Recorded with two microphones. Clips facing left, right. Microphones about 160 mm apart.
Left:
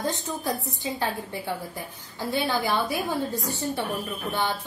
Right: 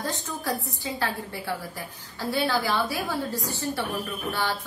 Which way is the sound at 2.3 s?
20° left (ahead or behind).